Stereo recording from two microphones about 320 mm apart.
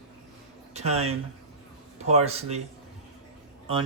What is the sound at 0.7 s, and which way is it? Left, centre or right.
Speech, centre.